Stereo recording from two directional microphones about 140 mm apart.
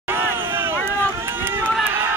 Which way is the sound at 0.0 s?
15° right (ahead or behind).